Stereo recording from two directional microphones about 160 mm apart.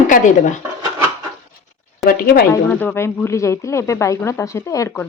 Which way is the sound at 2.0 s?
65° left (ahead or behind).